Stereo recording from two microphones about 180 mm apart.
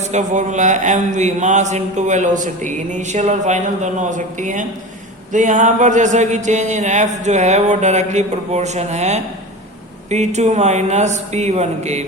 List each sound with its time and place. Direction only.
0.0 s speech: 40° right (ahead or behind)